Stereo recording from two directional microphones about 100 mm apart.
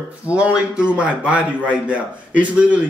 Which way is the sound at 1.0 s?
10° right (ahead or behind).